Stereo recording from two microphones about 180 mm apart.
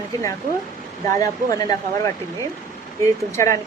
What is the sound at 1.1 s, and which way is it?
Speech, 20° left (ahead or behind).